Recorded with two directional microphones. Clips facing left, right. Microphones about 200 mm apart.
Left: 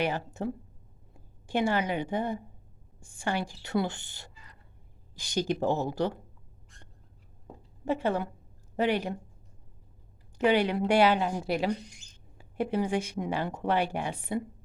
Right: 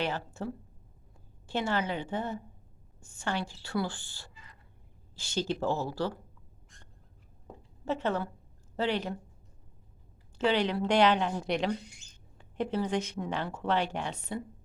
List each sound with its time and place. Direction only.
0.4 s a woman's voice: 20° left (ahead or behind)
7.9 s a woman's voice: 10° left (ahead or behind)
10.3 s speech: 15° left (ahead or behind)